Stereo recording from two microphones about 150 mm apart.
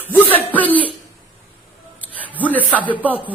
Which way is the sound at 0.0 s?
10° left (ahead or behind).